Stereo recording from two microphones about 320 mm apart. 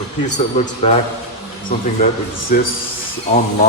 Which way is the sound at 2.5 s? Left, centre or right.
Left.